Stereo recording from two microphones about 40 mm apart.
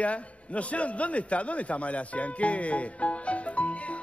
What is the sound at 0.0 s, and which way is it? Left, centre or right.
A man's voice, left.